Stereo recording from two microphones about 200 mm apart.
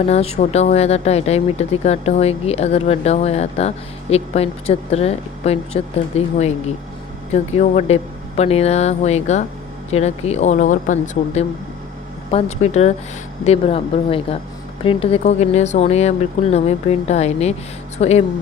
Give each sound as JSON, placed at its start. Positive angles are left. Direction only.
{"t": 0.0, "sound": "speech", "side_deg": 30}
{"t": 7.6, "sound": "speech", "side_deg": 35}